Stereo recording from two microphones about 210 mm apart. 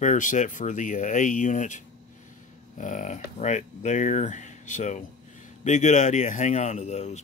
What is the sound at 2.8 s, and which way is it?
Speech, 35° left (ahead or behind).